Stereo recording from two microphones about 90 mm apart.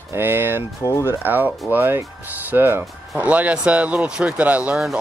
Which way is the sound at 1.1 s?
20° right (ahead or behind).